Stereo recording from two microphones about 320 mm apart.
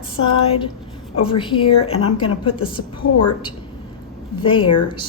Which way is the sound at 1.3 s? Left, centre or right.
Centre.